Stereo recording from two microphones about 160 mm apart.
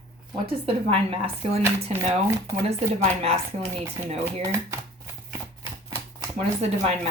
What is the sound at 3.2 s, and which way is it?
Speech, 40° right (ahead or behind).